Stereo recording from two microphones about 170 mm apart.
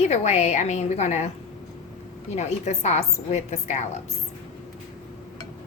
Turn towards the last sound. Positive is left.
turn(degrees=40)  # may be behind; listen again after turning